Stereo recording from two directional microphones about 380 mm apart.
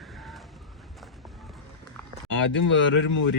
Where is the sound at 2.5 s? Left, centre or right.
Left.